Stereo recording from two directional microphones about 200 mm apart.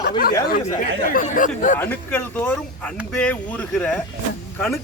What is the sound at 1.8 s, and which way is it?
A man's voice, 10° left (ahead or behind).